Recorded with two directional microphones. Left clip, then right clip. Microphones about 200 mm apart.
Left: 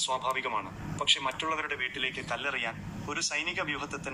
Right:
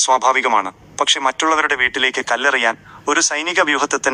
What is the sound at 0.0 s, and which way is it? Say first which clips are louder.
A man's voice: right 16 dB; 45° right (ahead or behind).